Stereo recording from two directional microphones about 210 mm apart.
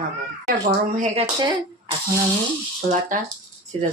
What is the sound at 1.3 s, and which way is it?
Speech, 20° right (ahead or behind).